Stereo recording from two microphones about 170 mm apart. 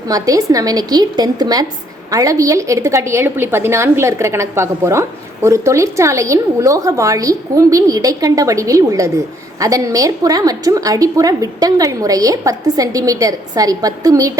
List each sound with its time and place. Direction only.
0.1 s a woman's voice: 20° right (ahead or behind)